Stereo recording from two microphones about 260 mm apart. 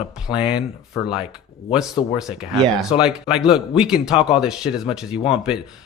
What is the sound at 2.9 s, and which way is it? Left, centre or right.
Speech, centre.